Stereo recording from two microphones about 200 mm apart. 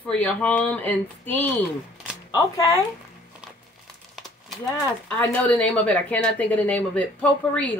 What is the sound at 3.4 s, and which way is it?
Crumpling, 5° right (ahead or behind).